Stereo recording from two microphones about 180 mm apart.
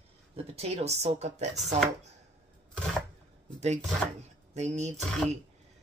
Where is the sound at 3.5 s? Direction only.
40° right (ahead or behind).